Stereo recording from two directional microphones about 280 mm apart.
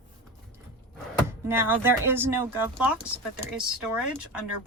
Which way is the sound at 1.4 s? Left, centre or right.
Centre.